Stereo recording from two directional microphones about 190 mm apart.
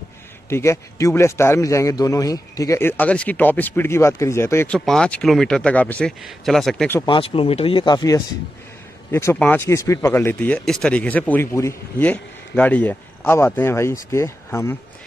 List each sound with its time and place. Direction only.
0.5 s speech: 15° left (ahead or behind)
7.1 s speech: 30° left (ahead or behind)